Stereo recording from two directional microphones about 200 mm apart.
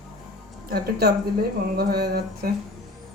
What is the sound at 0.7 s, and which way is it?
Speech, 50° right (ahead or behind).